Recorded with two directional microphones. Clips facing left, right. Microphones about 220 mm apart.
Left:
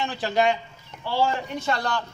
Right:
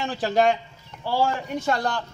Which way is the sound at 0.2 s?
45° right (ahead or behind).